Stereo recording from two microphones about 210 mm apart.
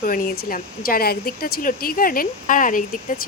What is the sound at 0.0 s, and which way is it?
Speech, 45° left (ahead or behind).